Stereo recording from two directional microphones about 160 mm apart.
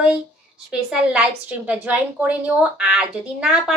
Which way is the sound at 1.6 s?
10° right (ahead or behind).